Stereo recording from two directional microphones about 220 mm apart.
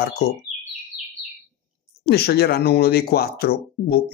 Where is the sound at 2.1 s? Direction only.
45° left (ahead or behind).